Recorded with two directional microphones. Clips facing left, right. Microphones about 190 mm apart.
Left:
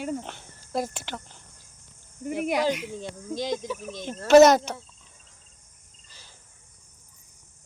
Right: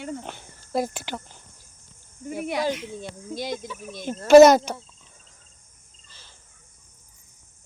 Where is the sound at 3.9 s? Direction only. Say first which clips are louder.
Right 3 dB; 10° right (ahead or behind).